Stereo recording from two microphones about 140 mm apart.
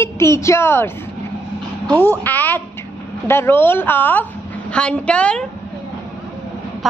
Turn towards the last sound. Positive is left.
turn(degrees=10)  # may be behind; listen again after turning